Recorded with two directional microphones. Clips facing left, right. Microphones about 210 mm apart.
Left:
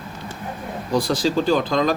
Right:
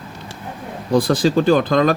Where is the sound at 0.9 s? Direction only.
55° right (ahead or behind).